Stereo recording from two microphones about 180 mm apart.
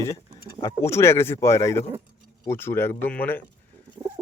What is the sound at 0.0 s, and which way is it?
Speech, 20° left (ahead or behind).